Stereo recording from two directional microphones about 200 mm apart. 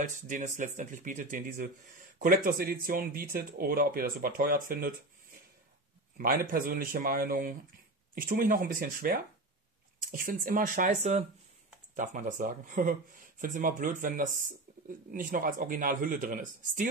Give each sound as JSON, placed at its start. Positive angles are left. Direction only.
{"t": 0.0, "sound": "speech", "side_deg": -40}
{"t": 6.1, "sound": "speech", "side_deg": -45}